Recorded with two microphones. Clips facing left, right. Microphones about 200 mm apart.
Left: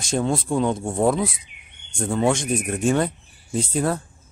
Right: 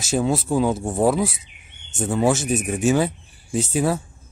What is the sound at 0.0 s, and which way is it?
Speech, 5° right (ahead or behind).